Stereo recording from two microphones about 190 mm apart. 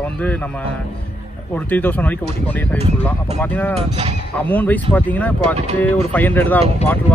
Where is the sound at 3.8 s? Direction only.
30° right (ahead or behind).